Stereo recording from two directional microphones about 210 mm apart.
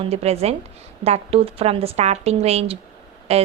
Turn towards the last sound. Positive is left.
turn(degrees=-30)  # may be behind; listen again after turning